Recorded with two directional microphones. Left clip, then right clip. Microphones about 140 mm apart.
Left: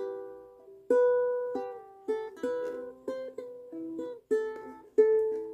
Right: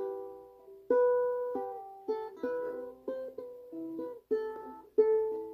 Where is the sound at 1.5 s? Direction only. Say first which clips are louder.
Left 1 dB; 15° left (ahead or behind).